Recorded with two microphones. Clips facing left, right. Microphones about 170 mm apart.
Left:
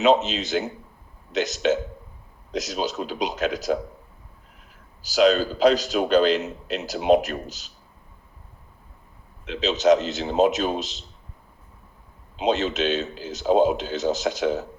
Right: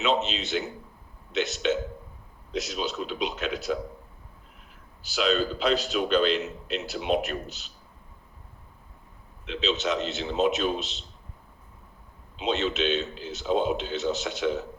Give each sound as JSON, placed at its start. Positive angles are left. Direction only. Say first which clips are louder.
{"t": 0.0, "sound": "a man's voice", "louder": "left 7 dB", "side_deg": 40}
{"t": 5.0, "sound": "a man's voice", "louder": "left 7 dB", "side_deg": 40}
{"t": 9.5, "sound": "a man's voice", "louder": "left 9 dB", "side_deg": 40}
{"t": 12.4, "sound": "a man's voice", "louder": "left 4 dB", "side_deg": 40}